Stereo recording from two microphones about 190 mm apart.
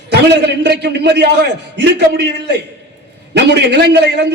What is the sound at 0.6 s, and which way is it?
A man's voice, 65° right (ahead or behind).